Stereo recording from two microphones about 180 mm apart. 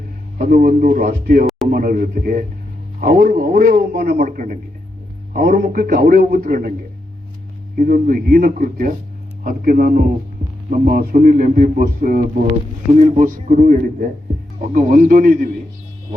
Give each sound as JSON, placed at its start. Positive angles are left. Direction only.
{"t": 0.3, "sound": "a man's voice", "side_deg": -50}
{"t": 7.8, "sound": "a man's voice", "side_deg": -50}
{"t": 13.0, "sound": "a man's voice", "side_deg": -40}